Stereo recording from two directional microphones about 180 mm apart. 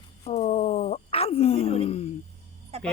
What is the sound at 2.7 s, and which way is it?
Speech, 35° right (ahead or behind).